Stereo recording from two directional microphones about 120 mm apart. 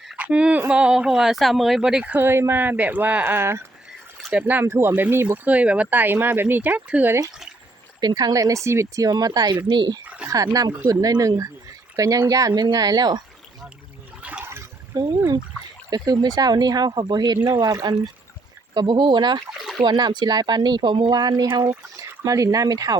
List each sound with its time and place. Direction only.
0.2 s a sound: 10° right (ahead or behind)
0.7 s speech: 5° right (ahead or behind)
2.1 s speech: 20° right (ahead or behind)
8.0 s speech: 35° right (ahead or behind)
10.2 s speech: 30° right (ahead or behind)
14.2 s a sound: 10° right (ahead or behind)
15.9 s speech: 35° right (ahead or behind)